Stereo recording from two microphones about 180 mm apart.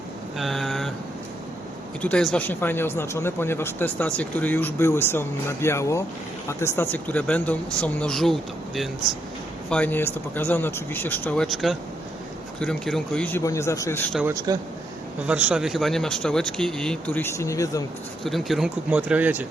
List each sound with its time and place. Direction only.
0.3 s vehicle: centre (ahead or behind)
2.0 s speech: 5° left (ahead or behind)
14.3 s speech: 20° right (ahead or behind)
15.3 s speech: 5° right (ahead or behind); by 17.8 s 15° left (ahead or behind)
18.2 s speech: centre (ahead or behind)